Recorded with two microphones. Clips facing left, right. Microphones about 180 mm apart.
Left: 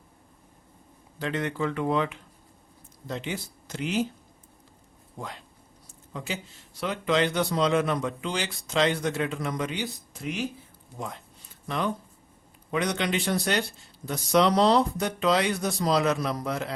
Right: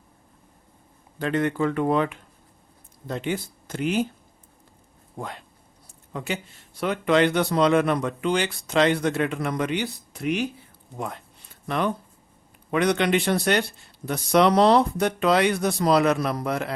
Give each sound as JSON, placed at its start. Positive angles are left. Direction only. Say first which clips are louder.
{"t": 1.2, "sound": "speech", "louder": "right 5 dB", "side_deg": -50}
{"t": 5.2, "sound": "speech", "louder": "right 4 dB", "side_deg": -55}
{"t": 12.7, "sound": "speech", "louder": "right 6 dB", "side_deg": -60}